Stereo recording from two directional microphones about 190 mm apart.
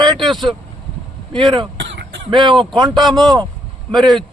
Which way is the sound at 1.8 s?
65° right (ahead or behind).